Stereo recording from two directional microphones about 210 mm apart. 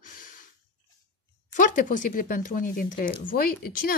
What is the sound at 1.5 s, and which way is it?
Speech, 40° left (ahead or behind).